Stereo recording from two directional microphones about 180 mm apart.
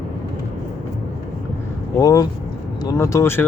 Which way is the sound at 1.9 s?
20° left (ahead or behind).